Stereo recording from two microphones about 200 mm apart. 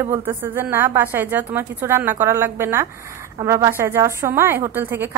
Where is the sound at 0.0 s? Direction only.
15° right (ahead or behind).